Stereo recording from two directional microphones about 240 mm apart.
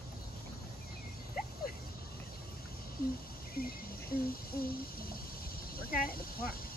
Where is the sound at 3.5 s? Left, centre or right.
Left.